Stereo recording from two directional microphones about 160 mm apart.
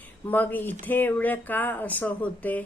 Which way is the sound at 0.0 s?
10° left (ahead or behind).